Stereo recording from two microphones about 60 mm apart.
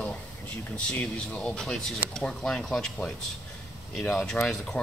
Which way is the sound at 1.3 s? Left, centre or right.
Centre.